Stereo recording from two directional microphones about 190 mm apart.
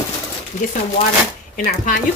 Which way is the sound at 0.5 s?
40° left (ahead or behind).